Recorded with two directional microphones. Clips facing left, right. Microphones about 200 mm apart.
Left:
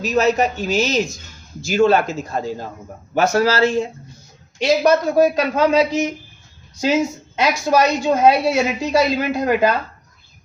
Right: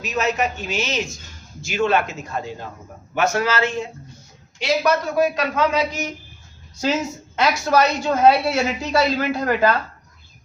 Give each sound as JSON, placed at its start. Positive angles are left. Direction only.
{"t": 0.0, "sound": "speech", "side_deg": 35}
{"t": 6.8, "sound": "a woman's voice", "side_deg": 15}